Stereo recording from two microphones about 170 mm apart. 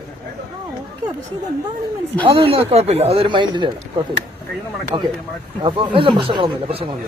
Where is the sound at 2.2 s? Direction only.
30° right (ahead or behind).